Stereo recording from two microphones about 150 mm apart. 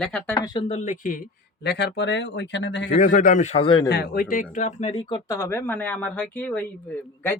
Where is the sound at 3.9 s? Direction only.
90° left; by 5.3 s 30° left (ahead or behind).